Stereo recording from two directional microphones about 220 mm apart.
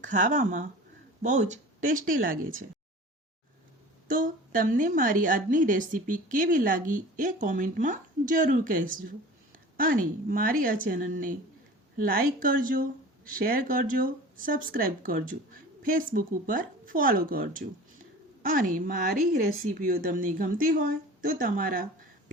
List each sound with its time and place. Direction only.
0.0 s a woman's voice: 35° right (ahead or behind)
4.1 s a woman's voice: 40° right (ahead or behind)